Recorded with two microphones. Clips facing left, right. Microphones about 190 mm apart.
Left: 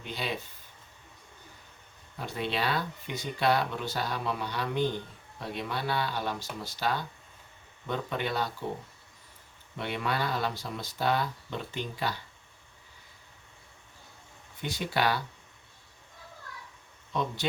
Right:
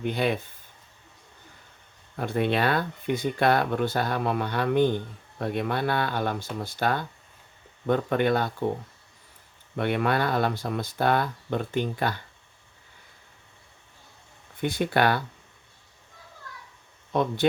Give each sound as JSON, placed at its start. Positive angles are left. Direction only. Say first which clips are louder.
{"t": 0.0, "sound": "speech", "louder": "right 10 dB", "side_deg": -55}
{"t": 2.1, "sound": "speech", "louder": "right 8 dB", "side_deg": -55}
{"t": 9.7, "sound": "speech", "louder": "right 7 dB", "side_deg": -55}
{"t": 14.6, "sound": "speech", "louder": "right 6 dB", "side_deg": -55}
{"t": 17.1, "sound": "speech", "louder": "right 7 dB", "side_deg": -55}